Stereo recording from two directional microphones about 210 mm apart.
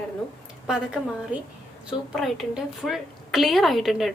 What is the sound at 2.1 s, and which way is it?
A woman's voice, centre (ahead or behind).